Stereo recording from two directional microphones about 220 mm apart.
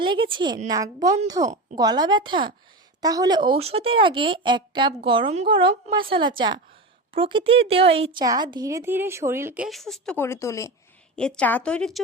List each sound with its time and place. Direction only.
0.0 s a woman's voice: 20° right (ahead or behind); by 11.9 s 5° left (ahead or behind)